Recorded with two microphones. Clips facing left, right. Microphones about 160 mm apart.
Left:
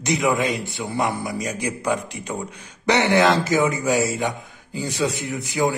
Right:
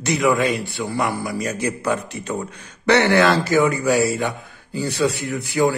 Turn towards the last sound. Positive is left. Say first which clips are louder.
# right 3 dB
turn(degrees=20)  # may be behind; listen again after turning